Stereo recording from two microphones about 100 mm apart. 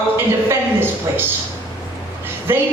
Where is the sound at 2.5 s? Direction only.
20° right (ahead or behind).